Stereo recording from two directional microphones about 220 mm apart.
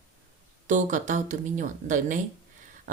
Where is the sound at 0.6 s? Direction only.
35° right (ahead or behind).